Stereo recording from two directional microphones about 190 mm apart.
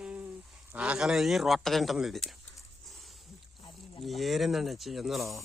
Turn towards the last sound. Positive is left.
turn(degrees=0)  # may be behind; listen again after turning